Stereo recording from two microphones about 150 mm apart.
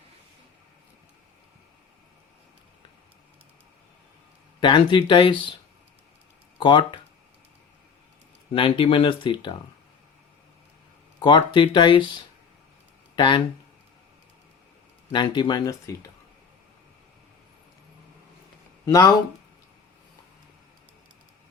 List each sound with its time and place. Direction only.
4.6 s speech: 30° left (ahead or behind)
6.6 s speech: 35° left (ahead or behind)
8.5 s speech: 35° left (ahead or behind)
11.2 s speech: 30° left (ahead or behind)
13.1 s speech: 35° left (ahead or behind)
15.1 s speech: 30° left (ahead or behind)
18.9 s speech: 25° left (ahead or behind)